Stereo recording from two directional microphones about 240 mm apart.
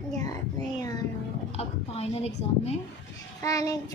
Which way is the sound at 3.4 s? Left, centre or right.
Centre.